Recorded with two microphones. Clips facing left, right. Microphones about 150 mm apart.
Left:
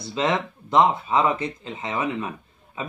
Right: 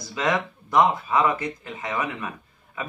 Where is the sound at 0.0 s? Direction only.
25° left (ahead or behind).